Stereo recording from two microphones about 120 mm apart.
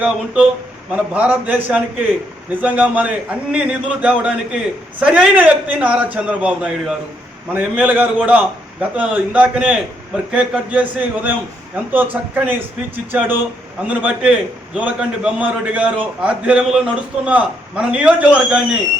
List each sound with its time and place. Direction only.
0.9 s a man's voice: 10° right (ahead or behind)